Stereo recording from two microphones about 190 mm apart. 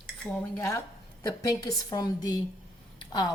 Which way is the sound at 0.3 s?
15° left (ahead or behind).